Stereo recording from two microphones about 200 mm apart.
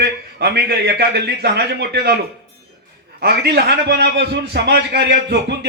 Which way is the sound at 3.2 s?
50° right (ahead or behind).